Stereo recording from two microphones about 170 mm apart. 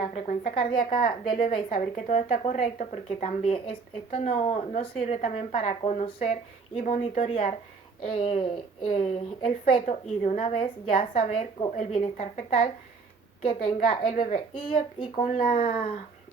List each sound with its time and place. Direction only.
0.1 s a woman's voice: 40° left (ahead or behind)
15.2 s speech: 50° left (ahead or behind)